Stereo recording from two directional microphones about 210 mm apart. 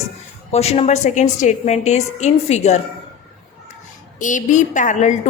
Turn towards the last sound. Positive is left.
turn(degrees=35)  # may be behind; listen again after turning